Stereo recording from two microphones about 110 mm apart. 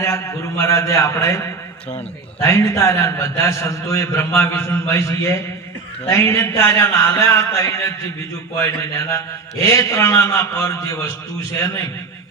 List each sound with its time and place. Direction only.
0.6 s a man's voice: 30° left (ahead or behind)
2.4 s a man's voice: 25° left (ahead or behind)